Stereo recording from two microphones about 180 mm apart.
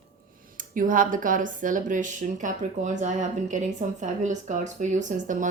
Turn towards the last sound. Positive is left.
turn(degrees=-45)  # may be behind; listen again after turning